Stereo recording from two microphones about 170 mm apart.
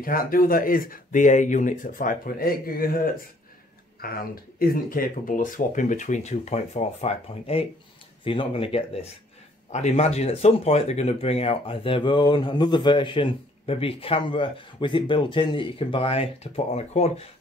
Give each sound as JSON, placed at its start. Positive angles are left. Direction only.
{"t": 0.0, "sound": "speech", "side_deg": 55}
{"t": 4.0, "sound": "speech", "side_deg": 60}